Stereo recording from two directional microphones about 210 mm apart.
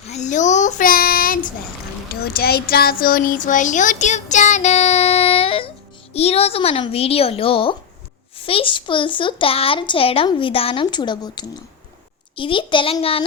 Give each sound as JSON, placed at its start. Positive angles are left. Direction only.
{"t": 0.1, "sound": "child singing", "side_deg": 35}
{"t": 2.2, "sound": "a child's voice", "side_deg": 45}